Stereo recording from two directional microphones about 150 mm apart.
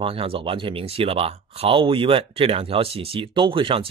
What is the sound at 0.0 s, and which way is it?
Speech, 40° right (ahead or behind).